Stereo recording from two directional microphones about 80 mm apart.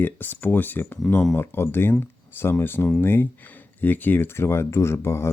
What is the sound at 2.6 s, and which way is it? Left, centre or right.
Speech, left.